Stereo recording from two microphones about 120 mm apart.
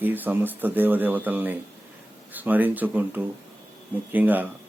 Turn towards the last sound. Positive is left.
turn(degrees=-15)  # may be behind; listen again after turning